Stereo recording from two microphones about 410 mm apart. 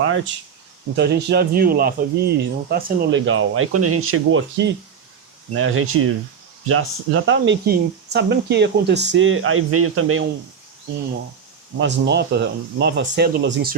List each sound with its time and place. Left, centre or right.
0.9 s speech: right
11.8 s speech: right